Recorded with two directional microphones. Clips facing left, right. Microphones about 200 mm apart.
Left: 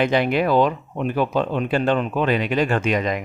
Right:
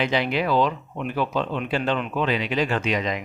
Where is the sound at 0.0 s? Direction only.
50° left (ahead or behind).